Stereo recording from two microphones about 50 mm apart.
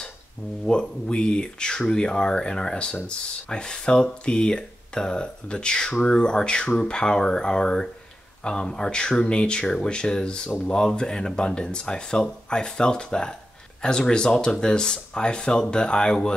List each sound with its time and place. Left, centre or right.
0.7 s speech: centre